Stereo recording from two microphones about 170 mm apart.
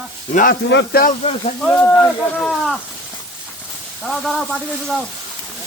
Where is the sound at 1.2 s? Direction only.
35° left (ahead or behind).